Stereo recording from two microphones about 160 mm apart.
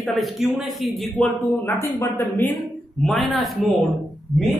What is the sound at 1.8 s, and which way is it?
Speech, 15° left (ahead or behind).